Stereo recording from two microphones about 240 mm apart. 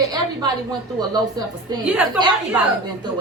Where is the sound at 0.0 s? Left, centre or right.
Centre.